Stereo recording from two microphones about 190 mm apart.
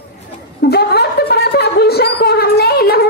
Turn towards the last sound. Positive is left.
turn(degrees=55)  # may be behind; listen again after turning